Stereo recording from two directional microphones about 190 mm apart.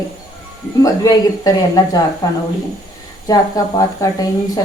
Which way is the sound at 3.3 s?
20° left (ahead or behind).